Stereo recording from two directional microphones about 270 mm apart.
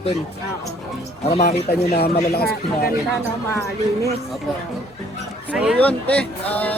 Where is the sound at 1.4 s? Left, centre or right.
Left.